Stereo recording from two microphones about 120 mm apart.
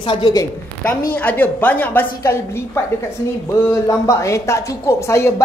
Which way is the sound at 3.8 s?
25° left (ahead or behind).